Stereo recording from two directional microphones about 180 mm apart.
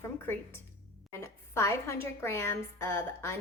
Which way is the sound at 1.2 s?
15° left (ahead or behind).